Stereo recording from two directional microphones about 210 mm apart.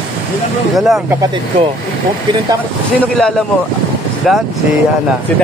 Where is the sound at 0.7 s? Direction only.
Centre (ahead or behind).